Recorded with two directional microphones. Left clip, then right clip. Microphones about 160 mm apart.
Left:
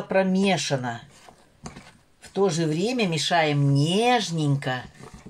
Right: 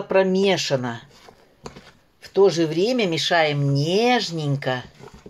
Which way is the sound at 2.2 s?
40° right (ahead or behind).